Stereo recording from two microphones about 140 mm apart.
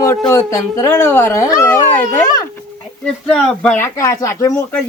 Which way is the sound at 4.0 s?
20° left (ahead or behind).